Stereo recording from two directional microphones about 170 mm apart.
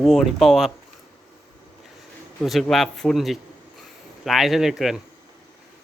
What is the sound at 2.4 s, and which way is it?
Speech, centre (ahead or behind).